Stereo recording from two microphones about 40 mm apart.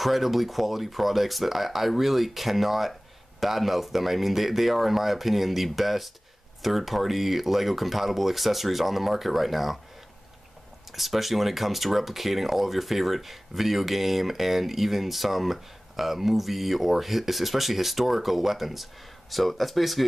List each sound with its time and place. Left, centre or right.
0.0 s speech: centre
10.9 s speech: centre